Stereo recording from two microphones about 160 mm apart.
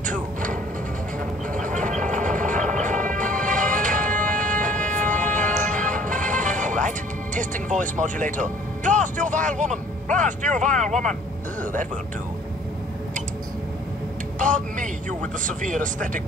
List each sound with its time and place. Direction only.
0.0 s music: 55° right (ahead or behind)
14.4 s speech: 55° right (ahead or behind)